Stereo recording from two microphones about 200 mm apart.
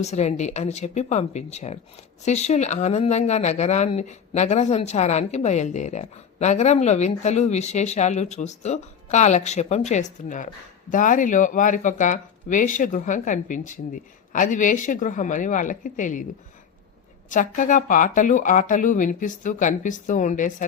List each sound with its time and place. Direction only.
0.0 s speech: 35° left (ahead or behind)
17.2 s speech: 40° left (ahead or behind)